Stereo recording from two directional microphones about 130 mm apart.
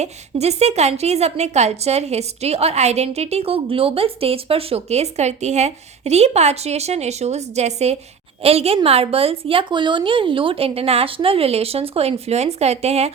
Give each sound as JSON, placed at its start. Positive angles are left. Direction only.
{"t": 0.0, "sound": "a woman's voice", "side_deg": -55}